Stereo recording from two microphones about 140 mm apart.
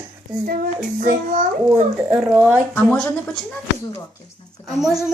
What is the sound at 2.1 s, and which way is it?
Speech, 10° right (ahead or behind).